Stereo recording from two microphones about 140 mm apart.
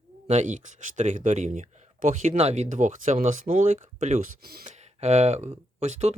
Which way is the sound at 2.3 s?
50° right (ahead or behind).